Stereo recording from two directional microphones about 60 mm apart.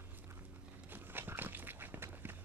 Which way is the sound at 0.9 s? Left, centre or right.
Right.